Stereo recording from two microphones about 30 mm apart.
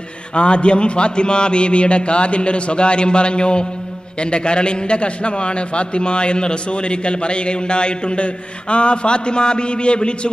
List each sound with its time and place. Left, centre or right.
0.3 s a man's voice: left